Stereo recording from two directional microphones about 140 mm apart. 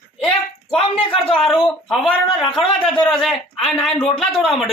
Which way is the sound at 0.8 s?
40° left (ahead or behind).